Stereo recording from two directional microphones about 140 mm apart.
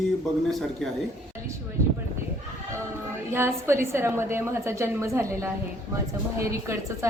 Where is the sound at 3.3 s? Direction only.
20° right (ahead or behind).